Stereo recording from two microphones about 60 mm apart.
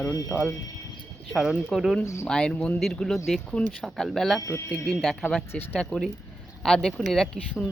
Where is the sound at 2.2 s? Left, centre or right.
Centre.